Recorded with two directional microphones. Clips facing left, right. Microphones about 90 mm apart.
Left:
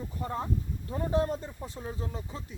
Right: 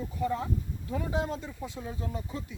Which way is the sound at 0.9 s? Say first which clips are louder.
Left 3 dB; 90° right.